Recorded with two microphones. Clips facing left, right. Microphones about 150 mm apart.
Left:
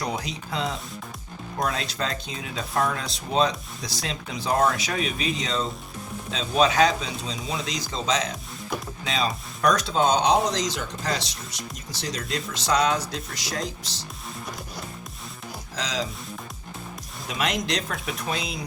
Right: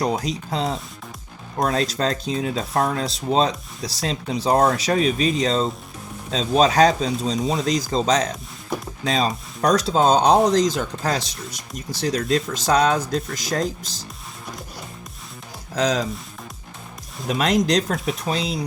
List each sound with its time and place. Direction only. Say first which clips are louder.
0.0 s speech: right 7 dB; 35° right (ahead or behind)
15.7 s speech: right 9 dB; 55° right (ahead or behind)
17.2 s speech: right 8 dB; 40° right (ahead or behind)